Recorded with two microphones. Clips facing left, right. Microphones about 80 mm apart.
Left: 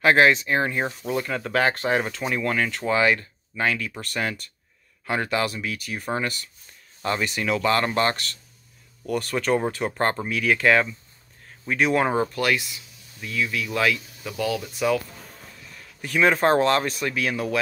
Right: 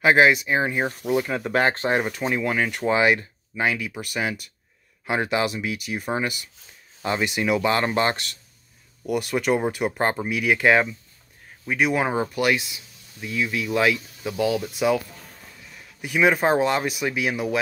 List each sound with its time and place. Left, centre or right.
0.0 s speech: centre
2.0 s speech: centre
11.6 s speech: centre